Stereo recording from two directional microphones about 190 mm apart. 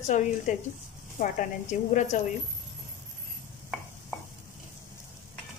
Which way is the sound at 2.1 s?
40° left (ahead or behind).